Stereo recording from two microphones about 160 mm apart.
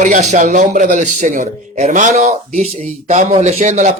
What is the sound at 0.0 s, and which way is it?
Speech, 50° right (ahead or behind).